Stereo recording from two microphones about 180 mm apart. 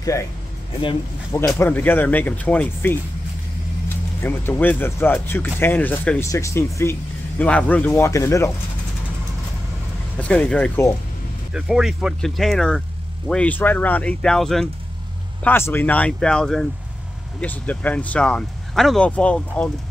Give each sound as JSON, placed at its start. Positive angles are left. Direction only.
{"t": 0.0, "sound": "speech", "side_deg": 15}
{"t": 1.6, "sound": "speech", "side_deg": 10}
{"t": 4.2, "sound": "speech", "side_deg": 10}
{"t": 10.1, "sound": "speech", "side_deg": 5}
{"t": 11.5, "sound": "speech", "side_deg": -5}